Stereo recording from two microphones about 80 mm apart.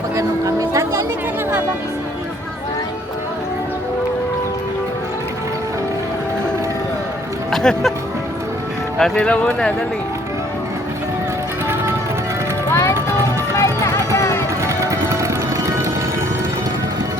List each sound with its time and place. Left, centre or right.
0.2 s music: right
7.5 s speech: centre
9.0 s speech: centre
12.7 s music: left
14.6 s music: right